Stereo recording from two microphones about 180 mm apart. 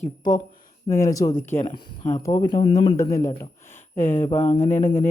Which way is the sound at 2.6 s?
30° left (ahead or behind).